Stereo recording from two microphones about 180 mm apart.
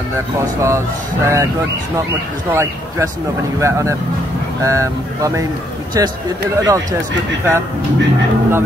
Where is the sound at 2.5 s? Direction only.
15° right (ahead or behind).